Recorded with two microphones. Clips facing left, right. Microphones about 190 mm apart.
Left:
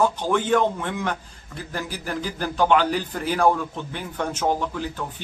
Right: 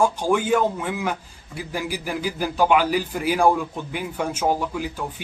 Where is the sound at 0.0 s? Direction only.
10° right (ahead or behind).